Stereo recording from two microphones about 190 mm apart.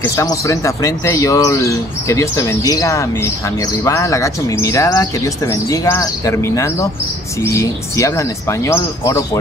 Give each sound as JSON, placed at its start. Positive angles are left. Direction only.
{"t": 0.0, "sound": "speech", "side_deg": 15}